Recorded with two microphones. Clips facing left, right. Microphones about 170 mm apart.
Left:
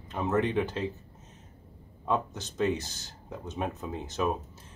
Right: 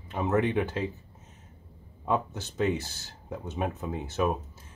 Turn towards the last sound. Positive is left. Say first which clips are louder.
# right 2 dB
turn(degrees=-5)  # may be behind; listen again after turning